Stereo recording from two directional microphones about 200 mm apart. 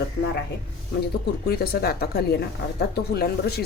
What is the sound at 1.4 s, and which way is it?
Speech, 50° left (ahead or behind).